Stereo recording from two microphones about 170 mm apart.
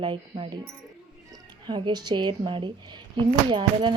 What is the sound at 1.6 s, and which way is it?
Speech, 25° right (ahead or behind).